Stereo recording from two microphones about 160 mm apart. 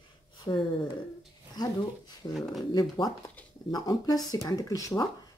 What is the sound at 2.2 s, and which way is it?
Speech, 20° left (ahead or behind).